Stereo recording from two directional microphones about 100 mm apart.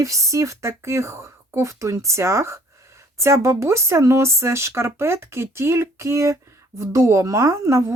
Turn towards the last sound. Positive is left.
turn(degrees=-30)  # may be behind; listen again after turning